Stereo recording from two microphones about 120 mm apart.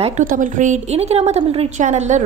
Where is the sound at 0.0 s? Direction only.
90° right.